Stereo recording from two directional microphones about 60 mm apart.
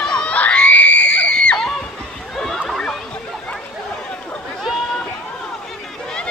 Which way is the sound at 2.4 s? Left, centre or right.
Centre.